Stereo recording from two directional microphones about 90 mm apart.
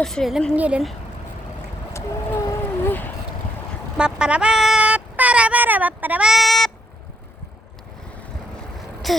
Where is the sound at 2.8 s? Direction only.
20° left (ahead or behind).